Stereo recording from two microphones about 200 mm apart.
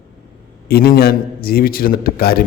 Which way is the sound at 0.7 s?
50° left (ahead or behind).